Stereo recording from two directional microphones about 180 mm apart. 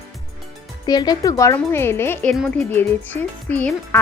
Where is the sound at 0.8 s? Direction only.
20° left (ahead or behind).